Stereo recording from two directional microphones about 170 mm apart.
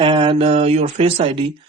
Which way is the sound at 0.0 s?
30° right (ahead or behind).